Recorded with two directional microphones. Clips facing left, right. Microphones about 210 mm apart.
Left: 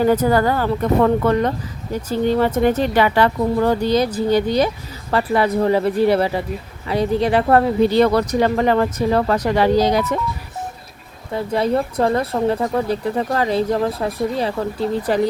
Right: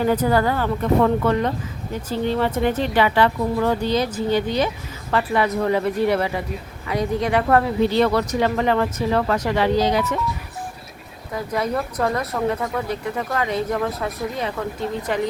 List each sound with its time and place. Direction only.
0.0 s speech: 45° left (ahead or behind)
11.3 s speech: 30° left (ahead or behind)